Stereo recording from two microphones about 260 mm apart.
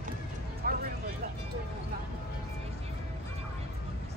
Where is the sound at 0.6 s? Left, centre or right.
Right.